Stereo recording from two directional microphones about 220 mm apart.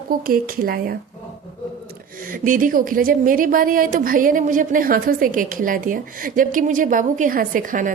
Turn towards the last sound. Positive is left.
turn(degrees=-35)  # may be behind; listen again after turning